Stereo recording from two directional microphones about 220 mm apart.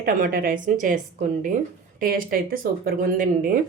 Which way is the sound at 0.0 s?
40° right (ahead or behind).